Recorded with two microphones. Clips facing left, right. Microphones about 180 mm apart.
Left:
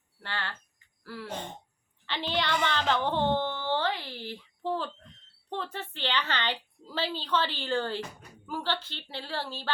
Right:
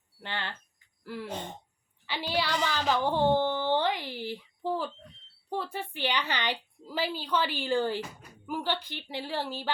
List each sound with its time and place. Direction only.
0.2 s speech: 20° right (ahead or behind)
1.0 s a sound: 20° right (ahead or behind)
5.5 s a woman's voice: 10° right (ahead or behind)